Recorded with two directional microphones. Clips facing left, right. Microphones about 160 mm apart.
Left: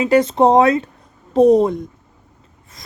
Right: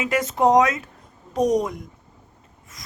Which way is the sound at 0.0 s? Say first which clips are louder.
Left 7 dB; 30° left (ahead or behind).